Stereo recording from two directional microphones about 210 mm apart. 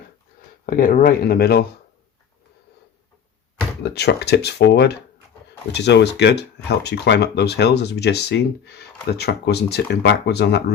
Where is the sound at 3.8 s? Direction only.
50° left (ahead or behind).